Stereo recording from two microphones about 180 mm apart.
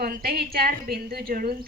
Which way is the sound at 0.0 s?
55° right (ahead or behind).